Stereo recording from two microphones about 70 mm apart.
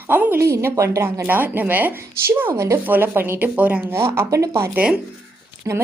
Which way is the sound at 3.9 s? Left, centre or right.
Right.